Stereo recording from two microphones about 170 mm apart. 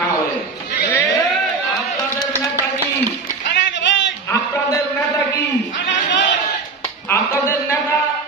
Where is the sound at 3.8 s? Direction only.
90° left.